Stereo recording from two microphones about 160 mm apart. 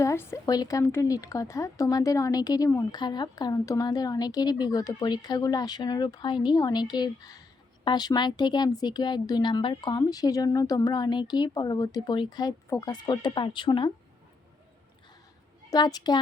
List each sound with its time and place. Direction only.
0.0 s speech: 15° left (ahead or behind)
15.7 s speech: 25° left (ahead or behind)